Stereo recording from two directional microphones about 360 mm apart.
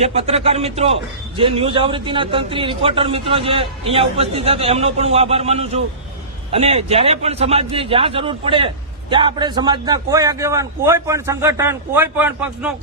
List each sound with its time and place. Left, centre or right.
0.0 s a man's voice: centre